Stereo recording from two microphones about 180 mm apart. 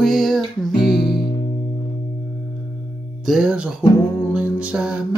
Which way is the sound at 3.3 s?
5° right (ahead or behind).